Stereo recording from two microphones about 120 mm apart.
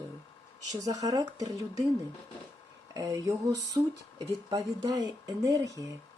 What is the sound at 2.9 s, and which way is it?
Speech, 30° right (ahead or behind).